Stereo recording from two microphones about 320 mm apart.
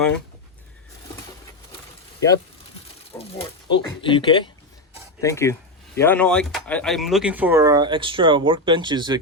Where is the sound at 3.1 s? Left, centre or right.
Centre.